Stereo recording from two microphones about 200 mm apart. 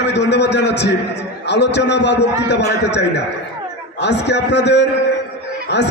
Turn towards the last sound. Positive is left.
turn(degrees=60)  # may be behind; listen again after turning